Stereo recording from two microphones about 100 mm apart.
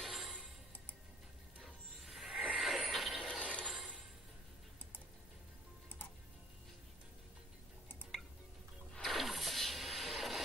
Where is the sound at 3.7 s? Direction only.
5° right (ahead or behind).